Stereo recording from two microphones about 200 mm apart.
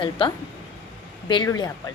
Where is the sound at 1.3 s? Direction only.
20° left (ahead or behind).